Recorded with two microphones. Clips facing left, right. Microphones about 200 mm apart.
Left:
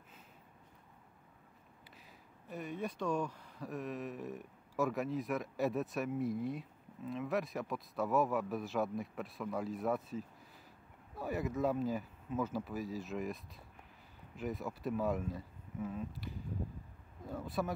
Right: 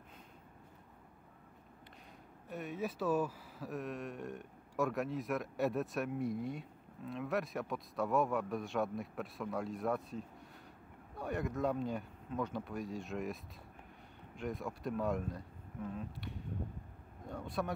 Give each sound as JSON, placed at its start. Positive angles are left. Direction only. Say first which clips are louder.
{"t": 2.5, "sound": "speech", "louder": "right 1 dB", "side_deg": 0}